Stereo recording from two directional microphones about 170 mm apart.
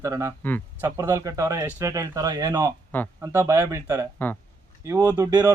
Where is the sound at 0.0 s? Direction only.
20° right (ahead or behind).